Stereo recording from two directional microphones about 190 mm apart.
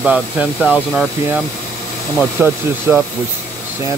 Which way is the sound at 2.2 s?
10° right (ahead or behind).